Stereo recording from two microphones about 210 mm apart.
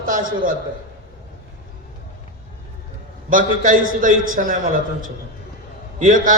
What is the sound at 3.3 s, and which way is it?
A man's voice, 40° right (ahead or behind).